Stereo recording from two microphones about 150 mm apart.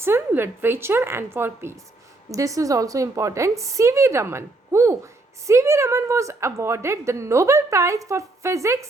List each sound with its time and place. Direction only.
0.0 s a woman's voice: 15° right (ahead or behind)